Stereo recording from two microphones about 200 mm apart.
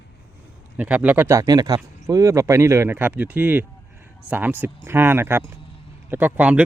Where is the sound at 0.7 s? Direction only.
5° right (ahead or behind).